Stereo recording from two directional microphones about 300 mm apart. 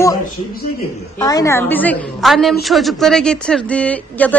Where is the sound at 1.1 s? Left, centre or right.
Centre.